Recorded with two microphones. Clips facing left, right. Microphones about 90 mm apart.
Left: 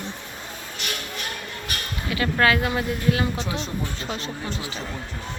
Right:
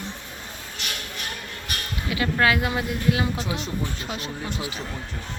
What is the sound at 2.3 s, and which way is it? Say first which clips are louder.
Speech: left 2 dB; 10° right (ahead or behind).